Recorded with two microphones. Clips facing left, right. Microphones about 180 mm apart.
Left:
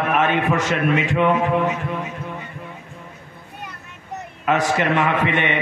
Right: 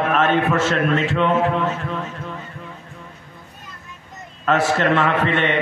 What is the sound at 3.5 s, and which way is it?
Vehicle, 70° left (ahead or behind).